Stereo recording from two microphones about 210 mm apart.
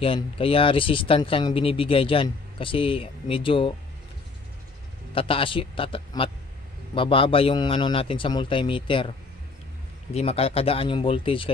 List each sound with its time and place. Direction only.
0.0 s speech: 25° left (ahead or behind)
5.1 s speech: 25° left (ahead or behind)
10.1 s speech: 30° left (ahead or behind)